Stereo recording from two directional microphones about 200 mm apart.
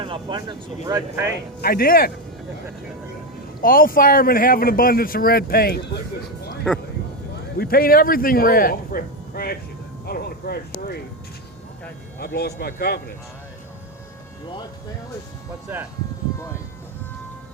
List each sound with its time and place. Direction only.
0.0 s speech: 25° right (ahead or behind)
1.6 s speech: 50° left (ahead or behind)
3.6 s speech: 45° left (ahead or behind)
6.7 s speech: centre (ahead or behind)
7.6 s speech: 45° left (ahead or behind)
10.1 s a sound: 50° left (ahead or behind)
10.8 s speech: 50° left (ahead or behind)
12.2 s speech: 55° left (ahead or behind)
15.7 s speech: 10° right (ahead or behind)